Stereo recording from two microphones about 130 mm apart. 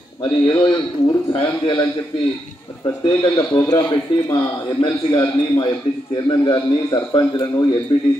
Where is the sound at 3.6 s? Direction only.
30° left (ahead or behind).